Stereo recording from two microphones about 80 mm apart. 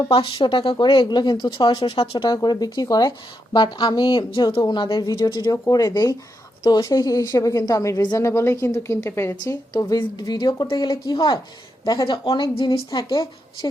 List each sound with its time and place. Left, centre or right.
0.1 s speech: left
3.5 s a woman's voice: left
5.4 s speech: left
6.6 s a woman's voice: left
9.5 s speech: left
10.0 s a woman's voice: left
12.0 s a woman's voice: left